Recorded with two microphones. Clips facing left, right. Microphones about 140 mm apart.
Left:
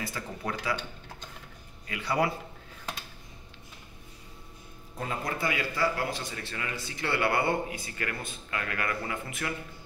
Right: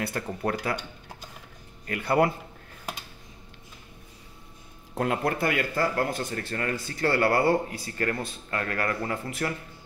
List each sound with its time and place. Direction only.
0.0 s speech: 55° right (ahead or behind)
1.9 s speech: 55° right (ahead or behind)
4.9 s speech: 70° right (ahead or behind); by 9.5 s 40° right (ahead or behind)